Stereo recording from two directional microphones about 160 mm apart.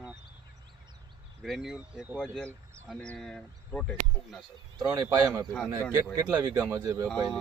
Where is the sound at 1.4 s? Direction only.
Centre (ahead or behind).